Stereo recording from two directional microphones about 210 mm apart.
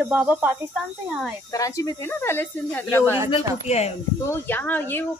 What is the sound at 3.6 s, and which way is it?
Speech, 30° left (ahead or behind).